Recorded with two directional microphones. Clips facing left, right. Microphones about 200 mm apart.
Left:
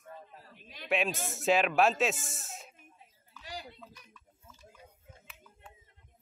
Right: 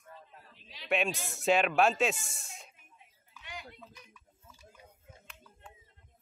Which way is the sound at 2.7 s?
35° left (ahead or behind).